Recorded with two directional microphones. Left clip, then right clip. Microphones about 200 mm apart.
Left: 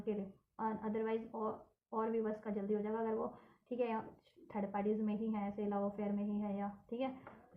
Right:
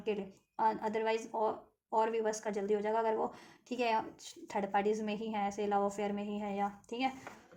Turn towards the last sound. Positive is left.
turn(degrees=-40)  # may be behind; listen again after turning